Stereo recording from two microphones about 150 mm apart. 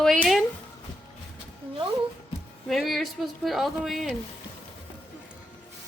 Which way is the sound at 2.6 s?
Centre (ahead or behind).